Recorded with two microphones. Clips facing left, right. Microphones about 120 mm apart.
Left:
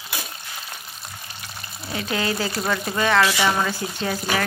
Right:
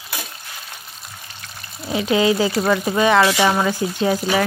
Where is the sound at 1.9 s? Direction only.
20° right (ahead or behind).